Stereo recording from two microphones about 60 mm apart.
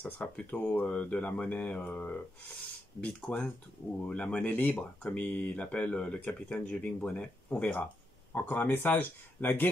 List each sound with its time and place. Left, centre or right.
0.0 s speech: left